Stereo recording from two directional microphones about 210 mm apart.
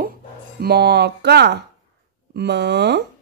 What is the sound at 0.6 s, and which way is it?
Speech, 50° right (ahead or behind).